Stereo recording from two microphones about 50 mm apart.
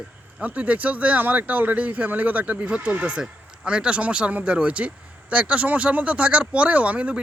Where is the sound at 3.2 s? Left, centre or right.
Centre.